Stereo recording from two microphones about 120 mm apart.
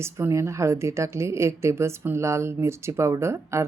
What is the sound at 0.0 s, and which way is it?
A woman's voice, 25° right (ahead or behind).